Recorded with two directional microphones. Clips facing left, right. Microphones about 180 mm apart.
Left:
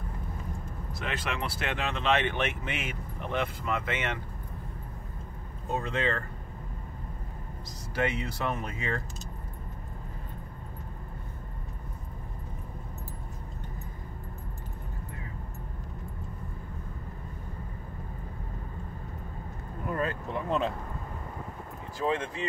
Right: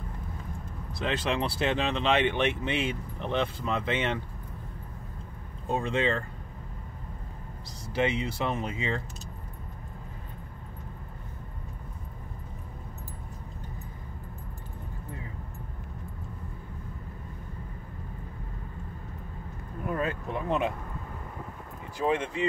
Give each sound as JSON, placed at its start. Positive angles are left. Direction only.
{"t": 0.9, "sound": "speech", "side_deg": -25}
{"t": 5.9, "sound": "speech", "side_deg": -25}
{"t": 7.9, "sound": "speech", "side_deg": -25}
{"t": 19.9, "sound": "vehicle", "side_deg": -20}
{"t": 21.9, "sound": "speech", "side_deg": -20}